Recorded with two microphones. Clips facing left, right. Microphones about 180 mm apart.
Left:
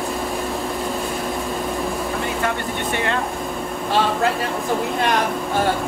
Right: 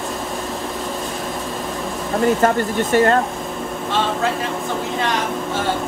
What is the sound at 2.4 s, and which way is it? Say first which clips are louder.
Speech: right 6 dB; 45° right (ahead or behind).